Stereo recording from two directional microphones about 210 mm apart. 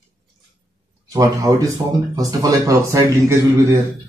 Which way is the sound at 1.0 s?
15° right (ahead or behind).